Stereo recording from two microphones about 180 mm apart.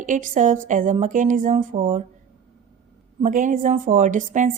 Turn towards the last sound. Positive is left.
turn(degrees=-45)  # may be behind; listen again after turning